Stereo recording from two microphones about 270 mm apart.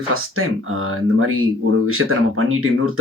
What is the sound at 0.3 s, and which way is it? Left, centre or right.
Speech, right.